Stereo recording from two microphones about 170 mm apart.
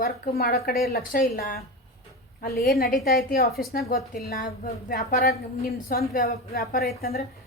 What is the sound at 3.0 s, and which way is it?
Speech, 60° left (ahead or behind).